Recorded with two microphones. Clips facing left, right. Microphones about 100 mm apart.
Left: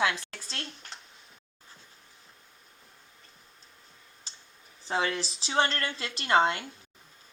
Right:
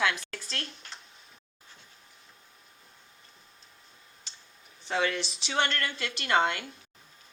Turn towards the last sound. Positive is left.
turn(degrees=30)  # may be behind; listen again after turning